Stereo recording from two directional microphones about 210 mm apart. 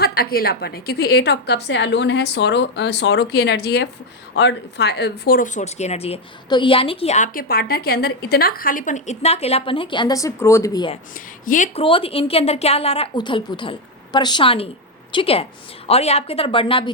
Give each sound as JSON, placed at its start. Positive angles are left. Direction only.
{"t": 0.0, "sound": "a woman's voice", "side_deg": 45}
{"t": 11.4, "sound": "a woman's voice", "side_deg": 35}